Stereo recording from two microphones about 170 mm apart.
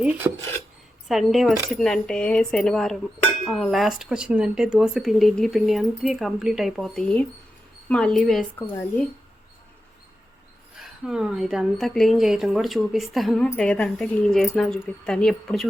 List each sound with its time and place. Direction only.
0.0 s dishes: 10° right (ahead or behind)
1.0 s a woman's voice: centre (ahead or behind)
10.8 s a woman's voice: 5° right (ahead or behind)